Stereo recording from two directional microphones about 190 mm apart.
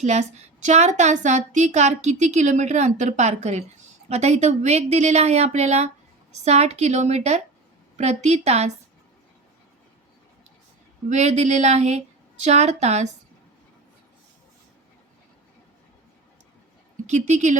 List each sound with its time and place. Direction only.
0.0 s a woman's voice: 35° right (ahead or behind)
11.1 s a woman's voice: 35° right (ahead or behind)
17.1 s a woman's voice: 40° right (ahead or behind)